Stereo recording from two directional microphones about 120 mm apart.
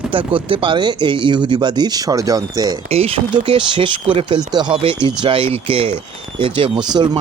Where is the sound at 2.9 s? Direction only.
55° right (ahead or behind).